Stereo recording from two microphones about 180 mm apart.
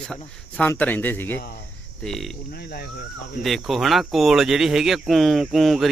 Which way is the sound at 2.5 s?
60° left (ahead or behind).